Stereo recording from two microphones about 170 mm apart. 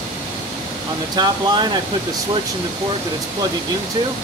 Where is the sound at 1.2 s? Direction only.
25° right (ahead or behind).